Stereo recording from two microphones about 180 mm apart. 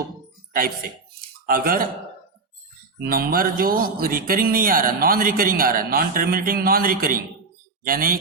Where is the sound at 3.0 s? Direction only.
55° right (ahead or behind).